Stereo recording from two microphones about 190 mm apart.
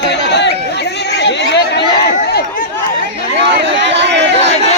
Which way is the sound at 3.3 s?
70° right (ahead or behind).